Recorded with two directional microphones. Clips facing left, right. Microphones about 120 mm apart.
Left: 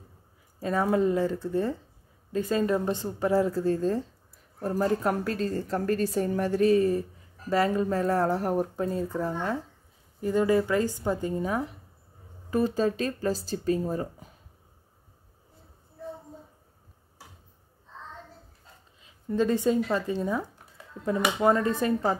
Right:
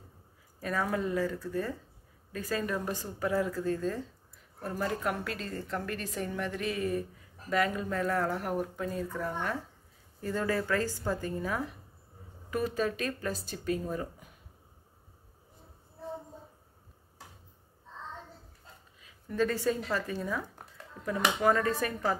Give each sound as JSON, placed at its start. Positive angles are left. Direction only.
{"t": 0.6, "sound": "a woman's voice", "side_deg": 25}
{"t": 18.9, "sound": "speech", "side_deg": 25}